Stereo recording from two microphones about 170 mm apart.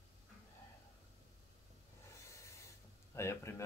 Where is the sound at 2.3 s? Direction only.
15° left (ahead or behind).